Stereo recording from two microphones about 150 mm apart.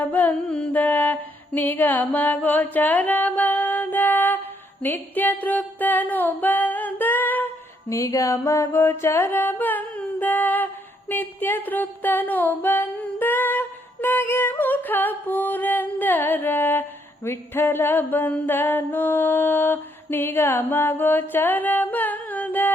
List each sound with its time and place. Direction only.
0.1 s music: 10° left (ahead or behind)
7.9 s mantra: 20° left (ahead or behind)
11.1 s music: 15° left (ahead or behind)
17.2 s a sound: 15° left (ahead or behind)